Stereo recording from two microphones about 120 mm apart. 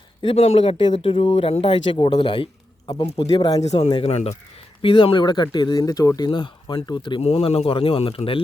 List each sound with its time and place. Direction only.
0.2 s speech: 50° left (ahead or behind)
3.6 s speech: 65° left (ahead or behind)
3.8 s speech: 50° left (ahead or behind)
4.8 s speech: 50° left (ahead or behind)
7.2 s speech: 55° left (ahead or behind)